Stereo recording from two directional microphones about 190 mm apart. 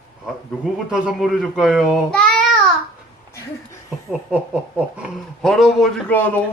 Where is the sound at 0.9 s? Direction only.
5° right (ahead or behind).